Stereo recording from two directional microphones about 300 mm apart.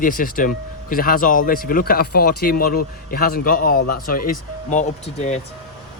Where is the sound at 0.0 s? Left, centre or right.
Left.